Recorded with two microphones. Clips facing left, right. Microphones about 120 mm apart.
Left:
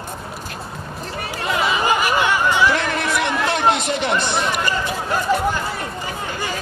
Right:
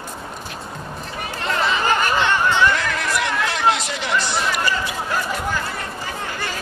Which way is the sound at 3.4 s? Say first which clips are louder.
Left 3 dB; 55° left (ahead or behind).